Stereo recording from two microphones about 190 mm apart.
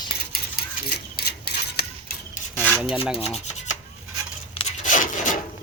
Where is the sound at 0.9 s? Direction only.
60° left (ahead or behind).